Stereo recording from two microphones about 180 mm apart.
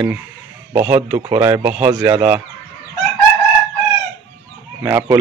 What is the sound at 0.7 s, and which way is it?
Speech, 10° right (ahead or behind).